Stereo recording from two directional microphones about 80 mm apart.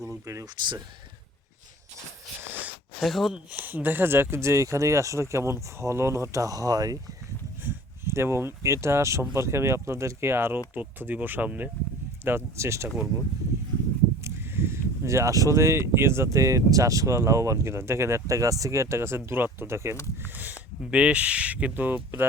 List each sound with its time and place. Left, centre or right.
0.0 s speech: right
2.4 s a sound: right
3.0 s speech: centre
3.5 s speech: right
7.6 s speech: right
12.2 s speech: right
14.3 s speech: right
20.2 s speech: right